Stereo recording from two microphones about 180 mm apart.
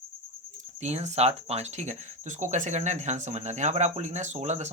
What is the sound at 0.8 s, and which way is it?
Speech, 40° right (ahead or behind).